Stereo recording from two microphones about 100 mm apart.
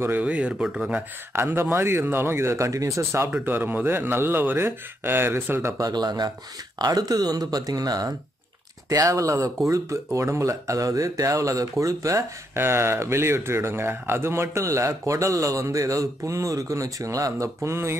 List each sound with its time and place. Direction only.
0.0 s speech: 15° right (ahead or behind)
1.3 s speech: 25° right (ahead or behind)